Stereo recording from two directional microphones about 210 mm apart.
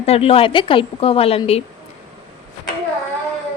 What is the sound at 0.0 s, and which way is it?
A woman's voice, 30° left (ahead or behind).